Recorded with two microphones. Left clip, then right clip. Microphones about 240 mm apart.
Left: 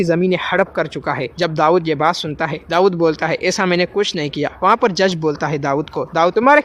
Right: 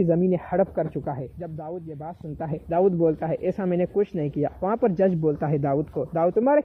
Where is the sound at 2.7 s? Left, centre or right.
Centre.